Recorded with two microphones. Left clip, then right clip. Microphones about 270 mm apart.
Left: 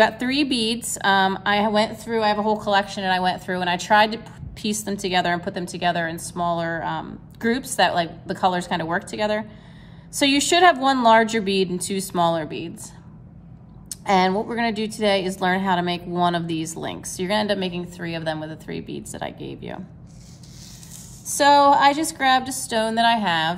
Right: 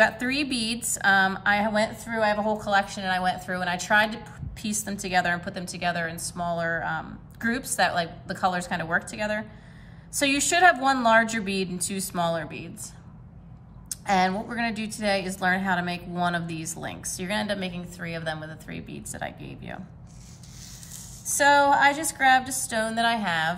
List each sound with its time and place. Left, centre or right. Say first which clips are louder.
0.0 s a woman's voice: left 3 dB; centre
1.7 s a woman's voice: left 5 dB; centre
2.6 s a woman's voice: left 4 dB; centre
4.1 s a woman's voice: left 5 dB; centre
4.7 s a woman's voice: left 2 dB; centre
11.2 s a woman's voice: left 7 dB; centre
11.7 s a woman's voice: left 6 dB; centre
13.8 s a woman's voice: left 4 dB; centre
18.8 s speech: left 7 dB; left
21.4 s a woman's voice: left 4 dB; centre
22.7 s a woman's voice: left 7 dB; centre